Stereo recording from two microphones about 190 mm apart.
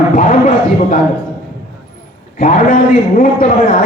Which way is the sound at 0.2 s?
45° left (ahead or behind).